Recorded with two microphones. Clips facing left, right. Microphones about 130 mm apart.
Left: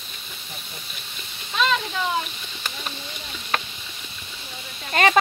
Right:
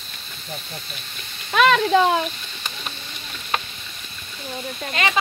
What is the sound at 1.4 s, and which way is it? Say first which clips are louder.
Speech: right 7 dB; 70° right (ahead or behind).